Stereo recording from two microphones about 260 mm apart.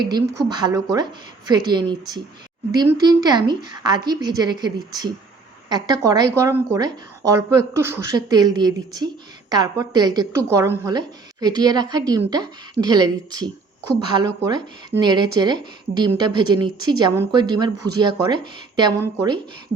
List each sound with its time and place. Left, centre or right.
0.0 s a woman's voice: centre